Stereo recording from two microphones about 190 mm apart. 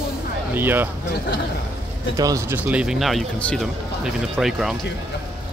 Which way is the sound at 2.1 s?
15° right (ahead or behind).